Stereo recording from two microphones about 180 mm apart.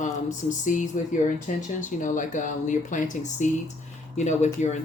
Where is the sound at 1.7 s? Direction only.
45° left (ahead or behind).